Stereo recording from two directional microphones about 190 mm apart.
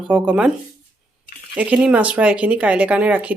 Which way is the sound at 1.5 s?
5° right (ahead or behind).